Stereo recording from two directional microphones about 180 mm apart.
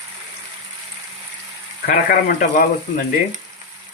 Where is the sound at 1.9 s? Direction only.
55° left (ahead or behind).